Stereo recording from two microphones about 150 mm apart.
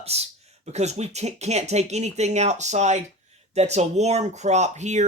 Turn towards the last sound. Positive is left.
turn(degrees=-50)  # may be behind; listen again after turning